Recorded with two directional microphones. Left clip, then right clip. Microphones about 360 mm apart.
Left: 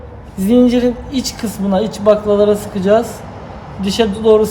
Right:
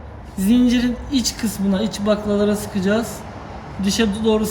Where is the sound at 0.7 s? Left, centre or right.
Centre.